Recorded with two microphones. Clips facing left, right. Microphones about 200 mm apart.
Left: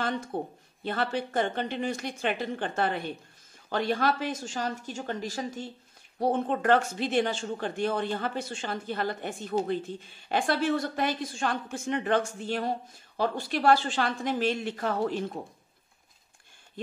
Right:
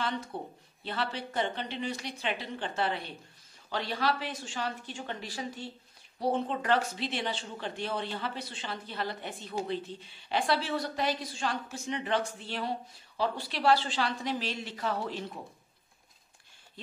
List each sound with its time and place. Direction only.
0.3 s speech: 50° left (ahead or behind)